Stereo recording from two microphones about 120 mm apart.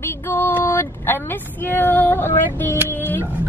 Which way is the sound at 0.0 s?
20° left (ahead or behind).